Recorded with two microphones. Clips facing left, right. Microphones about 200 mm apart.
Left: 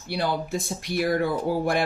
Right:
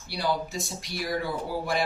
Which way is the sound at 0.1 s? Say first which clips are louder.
Left 3 dB; 55° left (ahead or behind).